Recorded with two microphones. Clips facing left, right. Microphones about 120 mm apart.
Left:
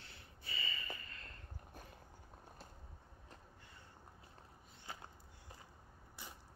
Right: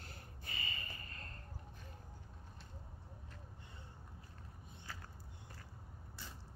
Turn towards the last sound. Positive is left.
turn(degrees=25)  # may be behind; listen again after turning